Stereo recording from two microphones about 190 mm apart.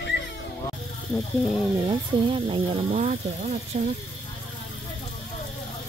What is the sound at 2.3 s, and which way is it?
Speech, 30° right (ahead or behind).